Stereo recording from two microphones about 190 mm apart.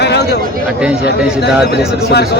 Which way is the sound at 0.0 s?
60° left (ahead or behind).